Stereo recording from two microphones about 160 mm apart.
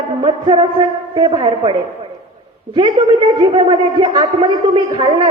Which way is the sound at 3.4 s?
30° right (ahead or behind).